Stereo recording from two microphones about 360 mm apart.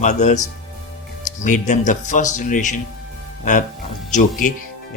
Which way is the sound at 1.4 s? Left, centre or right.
Left.